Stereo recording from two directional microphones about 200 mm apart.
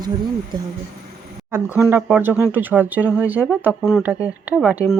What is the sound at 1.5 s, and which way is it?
Speech, 10° right (ahead or behind).